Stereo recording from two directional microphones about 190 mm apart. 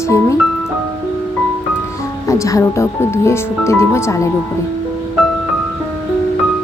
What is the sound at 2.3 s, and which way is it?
Speech, 15° left (ahead or behind).